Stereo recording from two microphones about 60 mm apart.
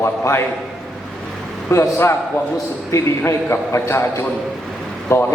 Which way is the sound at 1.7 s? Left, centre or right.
Left.